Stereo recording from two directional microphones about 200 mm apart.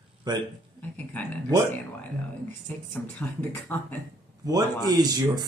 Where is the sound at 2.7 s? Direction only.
10° left (ahead or behind).